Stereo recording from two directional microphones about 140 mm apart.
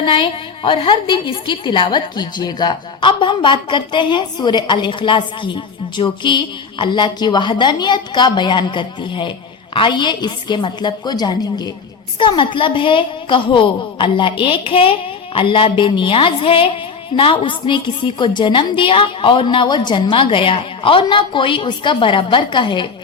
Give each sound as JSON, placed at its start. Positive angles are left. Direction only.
{"t": 0.0, "sound": "a woman's voice", "side_deg": 35}